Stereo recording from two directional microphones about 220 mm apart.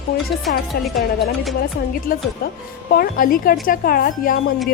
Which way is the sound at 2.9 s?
40° left (ahead or behind).